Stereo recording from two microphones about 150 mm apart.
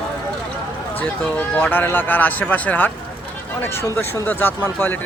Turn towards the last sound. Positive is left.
turn(degrees=10)  # may be behind; listen again after turning